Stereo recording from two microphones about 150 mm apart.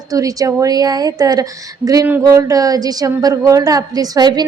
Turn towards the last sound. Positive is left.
turn(degrees=-25)  # may be behind; listen again after turning